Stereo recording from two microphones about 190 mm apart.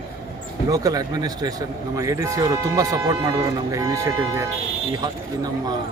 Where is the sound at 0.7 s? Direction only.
20° right (ahead or behind).